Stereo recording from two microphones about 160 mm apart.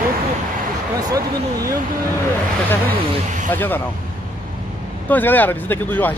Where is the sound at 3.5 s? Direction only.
10° left (ahead or behind).